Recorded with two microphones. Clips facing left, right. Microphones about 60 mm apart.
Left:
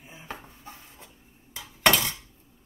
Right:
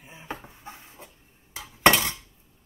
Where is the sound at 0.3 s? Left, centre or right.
Right.